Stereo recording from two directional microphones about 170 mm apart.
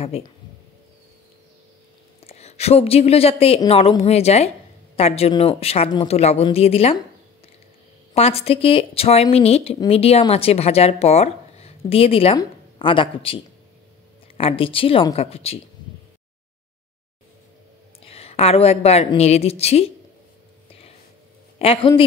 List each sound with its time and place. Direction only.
2.1 s a woman's voice: 35° left (ahead or behind)
8.1 s a woman's voice: 35° left (ahead or behind)
18.0 s a woman's voice: 35° left (ahead or behind)
21.5 s speech: 35° left (ahead or behind)